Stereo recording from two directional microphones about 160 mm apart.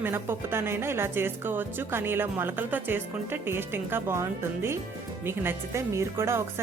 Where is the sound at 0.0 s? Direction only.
15° right (ahead or behind).